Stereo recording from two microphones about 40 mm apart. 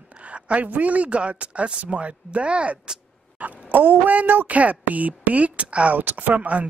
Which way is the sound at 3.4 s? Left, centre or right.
Right.